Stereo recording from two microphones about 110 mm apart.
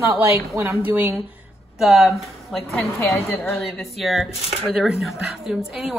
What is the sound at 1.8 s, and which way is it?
Speech, centre (ahead or behind).